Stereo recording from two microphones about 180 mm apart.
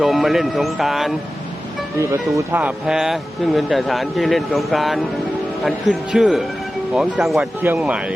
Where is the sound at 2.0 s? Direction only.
15° right (ahead or behind).